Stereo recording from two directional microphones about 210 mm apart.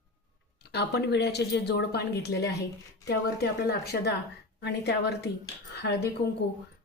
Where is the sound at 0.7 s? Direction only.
50° left (ahead or behind).